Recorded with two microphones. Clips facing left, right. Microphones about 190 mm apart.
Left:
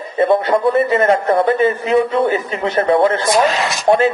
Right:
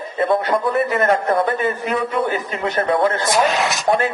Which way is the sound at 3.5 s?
Centre (ahead or behind).